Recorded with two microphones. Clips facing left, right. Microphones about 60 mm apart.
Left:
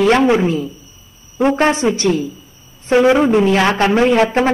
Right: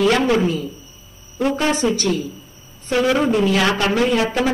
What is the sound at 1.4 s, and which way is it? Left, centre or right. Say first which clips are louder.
A man's voice: left 5 dB; centre.